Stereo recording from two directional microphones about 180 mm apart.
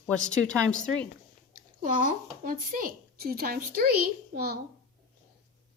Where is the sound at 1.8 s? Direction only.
50° right (ahead or behind).